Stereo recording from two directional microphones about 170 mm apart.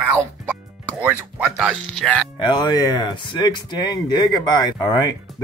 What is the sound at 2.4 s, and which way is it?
Speech, 25° left (ahead or behind).